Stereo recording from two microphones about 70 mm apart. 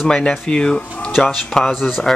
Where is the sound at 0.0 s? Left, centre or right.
Centre.